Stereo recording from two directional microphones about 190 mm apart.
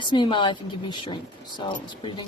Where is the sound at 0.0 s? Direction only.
25° left (ahead or behind).